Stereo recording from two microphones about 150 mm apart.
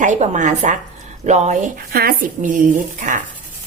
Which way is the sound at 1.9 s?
85° right.